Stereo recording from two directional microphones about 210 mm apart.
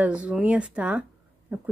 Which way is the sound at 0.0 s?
5° right (ahead or behind).